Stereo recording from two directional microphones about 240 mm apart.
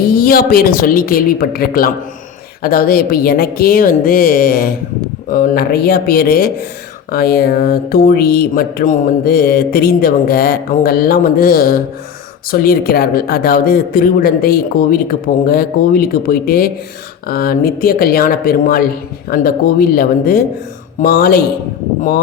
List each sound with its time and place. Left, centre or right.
0.0 s speech: left